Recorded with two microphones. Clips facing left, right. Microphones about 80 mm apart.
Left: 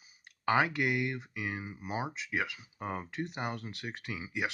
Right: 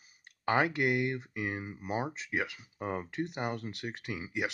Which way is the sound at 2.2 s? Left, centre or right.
Right.